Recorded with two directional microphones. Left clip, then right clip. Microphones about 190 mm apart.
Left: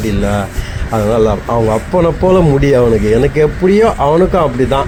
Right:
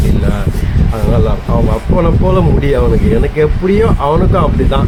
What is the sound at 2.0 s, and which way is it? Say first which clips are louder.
Speech: left 3 dB; 15° left (ahead or behind).